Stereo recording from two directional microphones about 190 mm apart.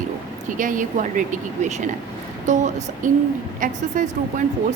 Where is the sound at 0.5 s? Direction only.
45° right (ahead or behind).